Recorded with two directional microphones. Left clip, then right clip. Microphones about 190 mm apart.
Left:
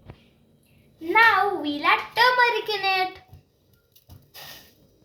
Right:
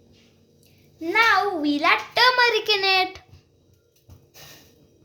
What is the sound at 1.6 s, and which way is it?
A child's voice, 65° right (ahead or behind).